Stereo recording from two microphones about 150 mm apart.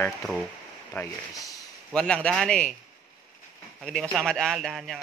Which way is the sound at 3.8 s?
5° left (ahead or behind).